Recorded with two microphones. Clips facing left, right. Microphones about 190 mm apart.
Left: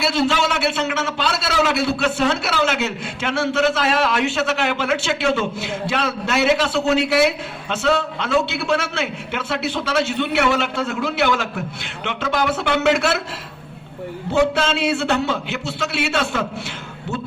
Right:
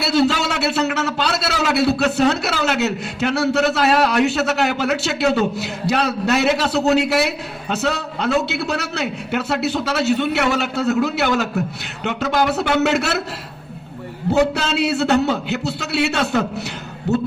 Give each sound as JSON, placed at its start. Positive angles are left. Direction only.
{"t": 0.2, "sound": "a man's voice", "side_deg": -40}
{"t": 14.3, "sound": "a man's voice", "side_deg": -40}